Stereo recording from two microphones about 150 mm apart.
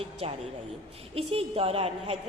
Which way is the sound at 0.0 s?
40° right (ahead or behind).